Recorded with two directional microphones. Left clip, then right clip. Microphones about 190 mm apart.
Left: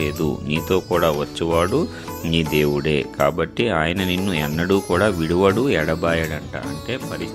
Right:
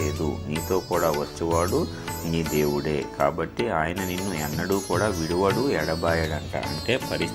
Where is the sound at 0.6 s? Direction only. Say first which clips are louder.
Left 5 dB; 65° left (ahead or behind).